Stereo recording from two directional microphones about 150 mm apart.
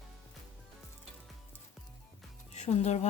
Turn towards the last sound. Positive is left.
turn(degrees=50)  # may be behind; listen again after turning